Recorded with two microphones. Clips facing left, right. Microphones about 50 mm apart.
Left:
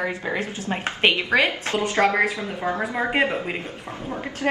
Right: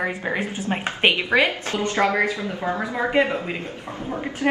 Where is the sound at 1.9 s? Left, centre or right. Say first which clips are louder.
Even; left.